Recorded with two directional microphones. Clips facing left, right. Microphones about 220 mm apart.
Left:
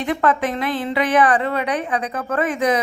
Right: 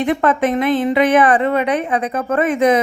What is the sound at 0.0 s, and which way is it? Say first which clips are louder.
A woman's voice: right 4 dB; 20° right (ahead or behind).